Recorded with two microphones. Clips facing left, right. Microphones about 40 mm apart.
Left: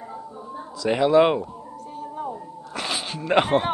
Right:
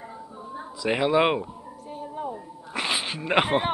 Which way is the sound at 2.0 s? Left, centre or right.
Centre.